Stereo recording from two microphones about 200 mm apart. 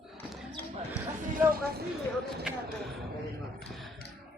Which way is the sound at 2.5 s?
5° right (ahead or behind).